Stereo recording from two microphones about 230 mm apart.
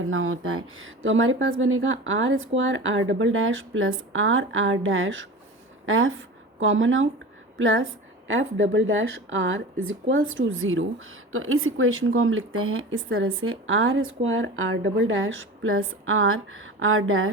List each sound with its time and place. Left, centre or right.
0.0 s a woman's voice: right